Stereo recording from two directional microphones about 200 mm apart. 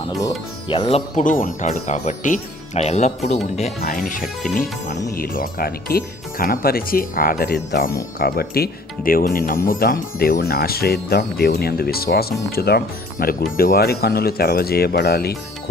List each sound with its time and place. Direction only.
0.2 s speech: 15° left (ahead or behind)
0.8 s speech: 30° left (ahead or behind)
5.1 s speech: 45° left (ahead or behind)